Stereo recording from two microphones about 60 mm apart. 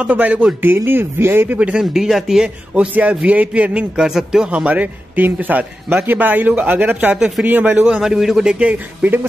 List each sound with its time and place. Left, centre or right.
0.1 s a man's voice: right
0.7 s speech: right
1.6 s speech: centre
2.7 s a man's voice: right
4.0 s speech: centre
4.6 s a man's voice: right
7.8 s speech: centre
8.5 s a man's voice: right